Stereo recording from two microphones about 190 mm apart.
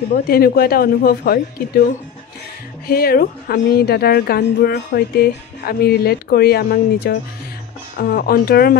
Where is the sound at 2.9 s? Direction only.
50° left (ahead or behind).